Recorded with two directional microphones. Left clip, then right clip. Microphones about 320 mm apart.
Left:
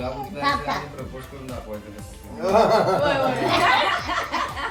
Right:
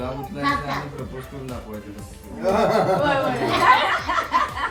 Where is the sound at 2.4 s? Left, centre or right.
Centre.